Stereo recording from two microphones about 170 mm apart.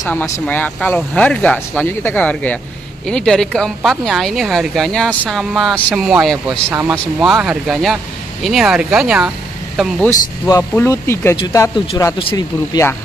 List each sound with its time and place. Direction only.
0.0 s speech: 10° left (ahead or behind); by 9.3 s 5° right (ahead or behind)
10.0 s speech: 20° left (ahead or behind)
12.2 s speech: 30° left (ahead or behind)